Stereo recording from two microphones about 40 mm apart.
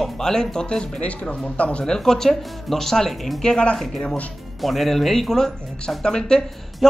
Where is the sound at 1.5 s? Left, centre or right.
Left.